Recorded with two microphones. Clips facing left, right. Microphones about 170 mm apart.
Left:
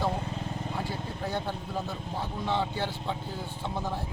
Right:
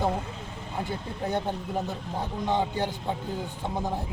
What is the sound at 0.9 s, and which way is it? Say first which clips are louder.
Speech: right 3 dB; 20° right (ahead or behind).